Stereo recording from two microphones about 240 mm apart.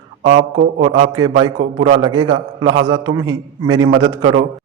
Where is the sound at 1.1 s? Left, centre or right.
Centre.